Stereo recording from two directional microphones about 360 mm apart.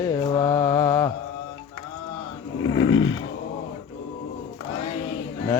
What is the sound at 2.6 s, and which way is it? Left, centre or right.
Snoring, left.